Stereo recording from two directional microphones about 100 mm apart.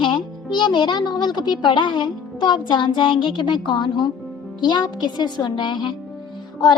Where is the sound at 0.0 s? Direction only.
50° left (ahead or behind).